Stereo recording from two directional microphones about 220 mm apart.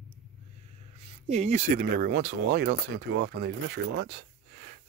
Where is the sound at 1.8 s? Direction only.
45° right (ahead or behind).